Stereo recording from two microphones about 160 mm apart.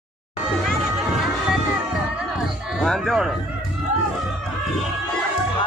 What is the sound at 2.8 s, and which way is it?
Speech, centre (ahead or behind).